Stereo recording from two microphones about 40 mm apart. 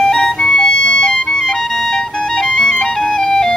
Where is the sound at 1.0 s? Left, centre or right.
Centre.